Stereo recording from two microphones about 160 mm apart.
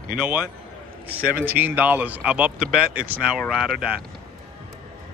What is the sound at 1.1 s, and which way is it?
Speech, 65° right (ahead or behind).